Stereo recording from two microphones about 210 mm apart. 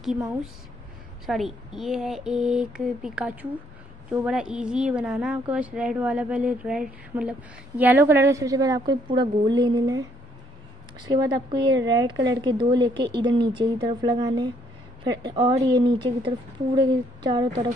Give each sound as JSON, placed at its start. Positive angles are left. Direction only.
{"t": 1.2, "sound": "a woman's voice", "side_deg": 0}
{"t": 11.1, "sound": "a woman's voice", "side_deg": -20}